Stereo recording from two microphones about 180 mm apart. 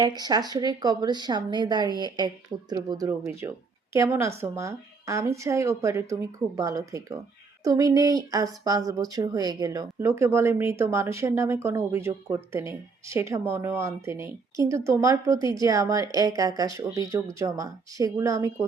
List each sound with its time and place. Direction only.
0.0 s speech: 20° right (ahead or behind)